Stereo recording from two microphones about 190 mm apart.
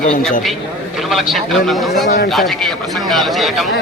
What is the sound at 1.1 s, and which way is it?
Speech, centre (ahead or behind).